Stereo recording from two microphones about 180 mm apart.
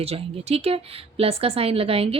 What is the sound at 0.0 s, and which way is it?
A woman's voice, 35° right (ahead or behind).